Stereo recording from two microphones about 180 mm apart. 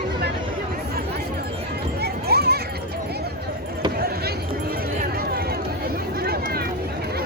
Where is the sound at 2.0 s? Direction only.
60° right (ahead or behind).